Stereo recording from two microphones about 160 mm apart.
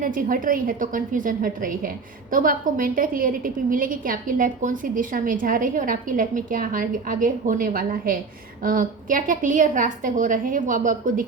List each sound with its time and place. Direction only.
0.0 s a woman's voice: 60° right (ahead or behind)